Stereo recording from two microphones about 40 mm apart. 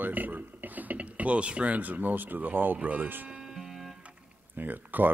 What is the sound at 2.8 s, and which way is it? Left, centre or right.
Speech, right.